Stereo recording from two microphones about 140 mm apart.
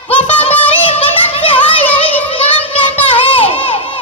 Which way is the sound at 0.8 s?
40° left (ahead or behind).